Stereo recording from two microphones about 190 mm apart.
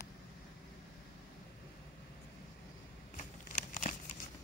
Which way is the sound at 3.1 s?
40° left (ahead or behind).